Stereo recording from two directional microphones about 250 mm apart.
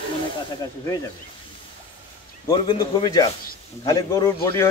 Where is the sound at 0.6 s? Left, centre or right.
Centre.